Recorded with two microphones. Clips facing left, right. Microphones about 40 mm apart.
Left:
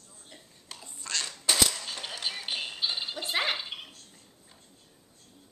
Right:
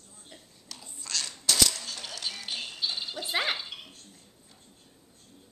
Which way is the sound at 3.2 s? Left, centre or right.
Centre.